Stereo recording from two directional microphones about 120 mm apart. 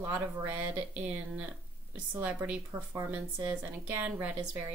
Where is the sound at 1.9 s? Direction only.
10° right (ahead or behind).